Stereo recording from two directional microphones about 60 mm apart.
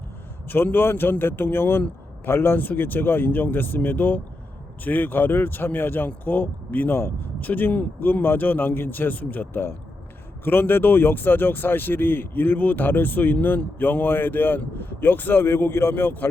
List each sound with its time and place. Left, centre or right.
0.4 s speech: left